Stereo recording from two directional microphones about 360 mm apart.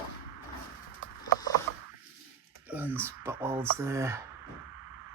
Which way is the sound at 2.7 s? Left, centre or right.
Centre.